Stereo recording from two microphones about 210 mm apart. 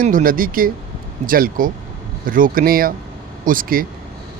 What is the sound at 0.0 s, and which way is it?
Speech, 40° right (ahead or behind).